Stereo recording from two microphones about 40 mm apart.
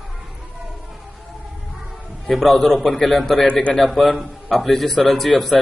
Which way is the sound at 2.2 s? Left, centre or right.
Centre.